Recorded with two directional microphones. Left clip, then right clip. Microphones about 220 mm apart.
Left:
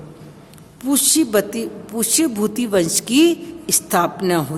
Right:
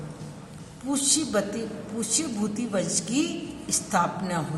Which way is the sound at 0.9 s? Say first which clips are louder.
Left 9 dB; 45° left (ahead or behind).